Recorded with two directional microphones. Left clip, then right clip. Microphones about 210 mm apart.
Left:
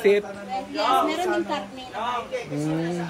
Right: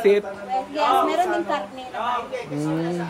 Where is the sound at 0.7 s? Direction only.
45° right (ahead or behind).